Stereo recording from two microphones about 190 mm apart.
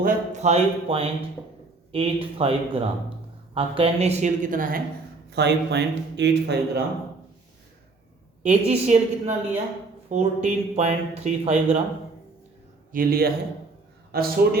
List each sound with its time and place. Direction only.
0.0 s speech: 40° right (ahead or behind)
5.3 s speech: 65° right (ahead or behind)
8.4 s speech: 35° right (ahead or behind)
12.9 s a man's voice: 50° right (ahead or behind)